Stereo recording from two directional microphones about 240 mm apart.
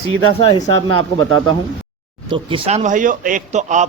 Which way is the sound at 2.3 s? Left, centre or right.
Right.